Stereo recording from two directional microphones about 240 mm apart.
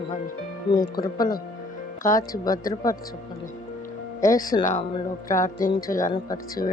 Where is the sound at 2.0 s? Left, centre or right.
Centre.